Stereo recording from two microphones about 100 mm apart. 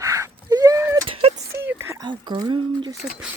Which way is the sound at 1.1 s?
75° right (ahead or behind).